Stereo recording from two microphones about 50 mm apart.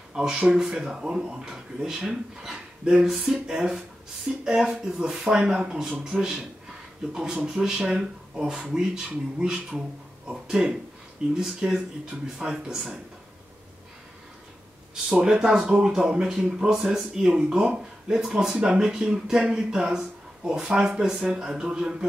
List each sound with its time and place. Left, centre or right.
0.1 s speech: centre
7.4 s speech: centre
12.7 s speech: centre
15.2 s speech: centre